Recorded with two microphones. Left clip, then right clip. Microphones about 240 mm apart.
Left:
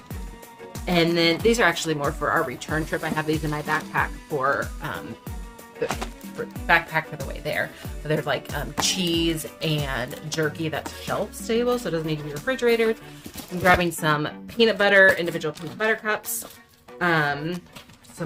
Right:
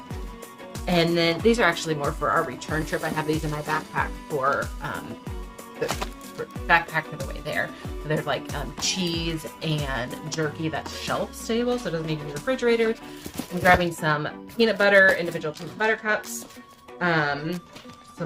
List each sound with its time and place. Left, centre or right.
0.9 s speech: left
6.7 s speech: left